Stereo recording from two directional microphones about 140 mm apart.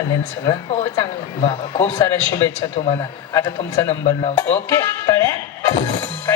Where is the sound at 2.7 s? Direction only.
45° left (ahead or behind).